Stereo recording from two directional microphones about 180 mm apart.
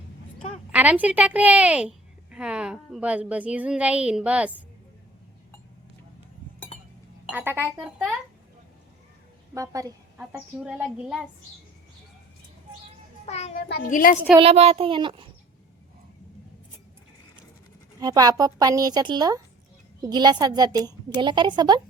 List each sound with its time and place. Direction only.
0.7 s a woman's voice: 10° right (ahead or behind)
6.7 s chink: 35° left (ahead or behind)
7.3 s a woman's voice: 10° right (ahead or behind)
9.6 s a woman's voice: 20° right (ahead or behind)
10.2 s a woman's voice: 5° right (ahead or behind)
13.2 s a child's voice: 40° left (ahead or behind)
13.7 s a woman's voice: 55° left (ahead or behind)
14.3 s a woman's voice: 35° right (ahead or behind)
18.0 s a woman's voice: 20° right (ahead or behind)